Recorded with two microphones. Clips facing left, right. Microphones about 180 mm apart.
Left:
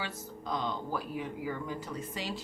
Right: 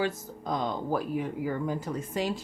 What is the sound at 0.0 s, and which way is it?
Speech, 45° right (ahead or behind).